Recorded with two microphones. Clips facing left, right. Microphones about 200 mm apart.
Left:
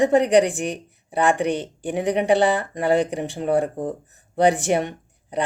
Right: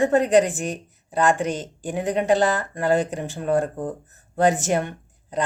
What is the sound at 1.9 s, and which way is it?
Speech, 15° left (ahead or behind).